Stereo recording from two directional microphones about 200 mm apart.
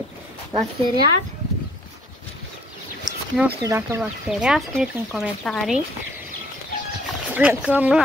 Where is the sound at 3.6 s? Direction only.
15° right (ahead or behind).